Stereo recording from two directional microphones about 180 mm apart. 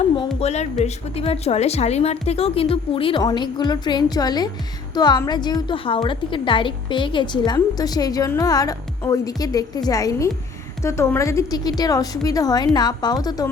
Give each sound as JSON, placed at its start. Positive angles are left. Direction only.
{"t": 0.3, "sound": "a woman's voice", "side_deg": 35}